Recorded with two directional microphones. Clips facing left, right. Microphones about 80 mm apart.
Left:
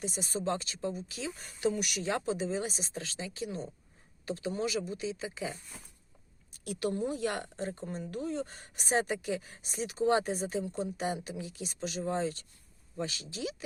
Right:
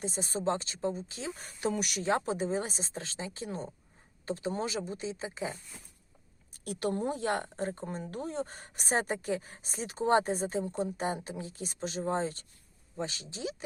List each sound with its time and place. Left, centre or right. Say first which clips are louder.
0.0 s a woman's voice: right 2 dB; right
13.0 s speech: even; right